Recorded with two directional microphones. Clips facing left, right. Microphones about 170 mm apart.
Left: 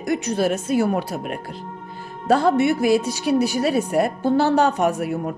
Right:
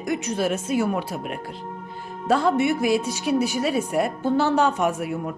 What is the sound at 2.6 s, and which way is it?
Speech, 35° left (ahead or behind).